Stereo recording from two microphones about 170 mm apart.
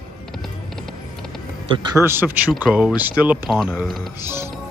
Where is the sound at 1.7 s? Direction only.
30° right (ahead or behind).